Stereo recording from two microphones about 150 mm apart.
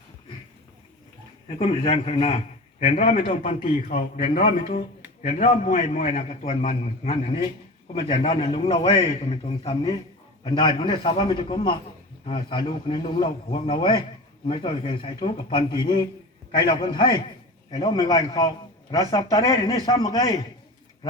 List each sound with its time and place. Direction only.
1.5 s a man's voice: 40° left (ahead or behind); by 20.3 s 25° left (ahead or behind)